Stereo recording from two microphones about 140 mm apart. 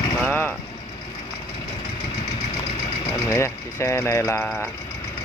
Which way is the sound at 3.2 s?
20° left (ahead or behind).